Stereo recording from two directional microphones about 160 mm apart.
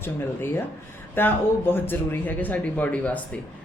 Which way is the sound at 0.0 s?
15° left (ahead or behind).